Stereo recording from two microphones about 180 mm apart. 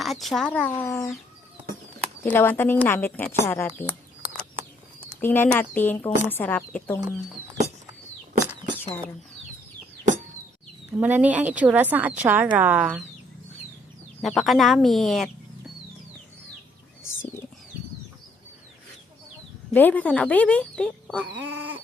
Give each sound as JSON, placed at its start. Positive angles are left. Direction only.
{"t": 0.0, "sound": "speech", "side_deg": 0}
{"t": 2.2, "sound": "speech", "side_deg": 10}
{"t": 5.2, "sound": "speech", "side_deg": 10}
{"t": 10.9, "sound": "a woman's voice", "side_deg": -10}
{"t": 14.2, "sound": "speech", "side_deg": 0}
{"t": 17.0, "sound": "bird", "side_deg": 90}
{"t": 19.7, "sound": "speech", "side_deg": 10}